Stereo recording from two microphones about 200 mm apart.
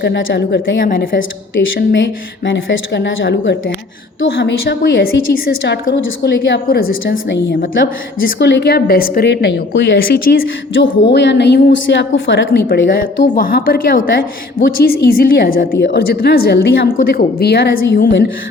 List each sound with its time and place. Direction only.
0.0 s a woman's voice: 60° left (ahead or behind)
1.1 s a woman's voice: 65° left (ahead or behind)
10.2 s a woman's voice: 45° left (ahead or behind); by 12.5 s 75° left (ahead or behind)
12.5 s a woman's voice: 50° left (ahead or behind)